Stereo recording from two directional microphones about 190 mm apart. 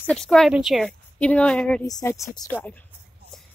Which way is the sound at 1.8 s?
15° left (ahead or behind).